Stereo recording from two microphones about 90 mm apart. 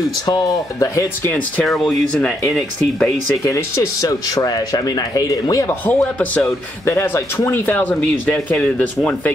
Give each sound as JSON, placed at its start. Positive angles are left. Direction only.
{"t": 0.3, "sound": "speech", "side_deg": 35}
{"t": 1.6, "sound": "speech", "side_deg": 5}
{"t": 3.4, "sound": "speech", "side_deg": 35}
{"t": 5.7, "sound": "speech", "side_deg": 20}
{"t": 6.9, "sound": "speech", "side_deg": 30}